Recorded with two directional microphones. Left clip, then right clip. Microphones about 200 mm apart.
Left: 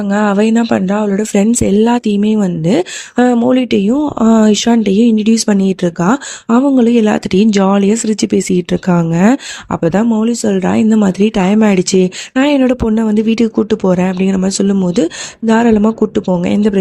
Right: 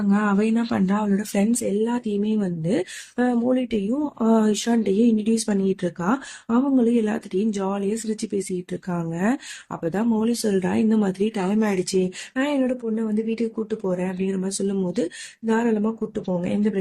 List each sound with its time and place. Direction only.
0.1 s speech: 45° left (ahead or behind)